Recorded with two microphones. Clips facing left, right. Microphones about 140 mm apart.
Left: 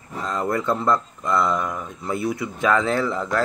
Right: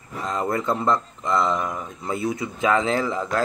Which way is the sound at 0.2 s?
20° right (ahead or behind).